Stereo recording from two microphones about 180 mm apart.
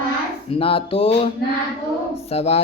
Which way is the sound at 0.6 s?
30° left (ahead or behind).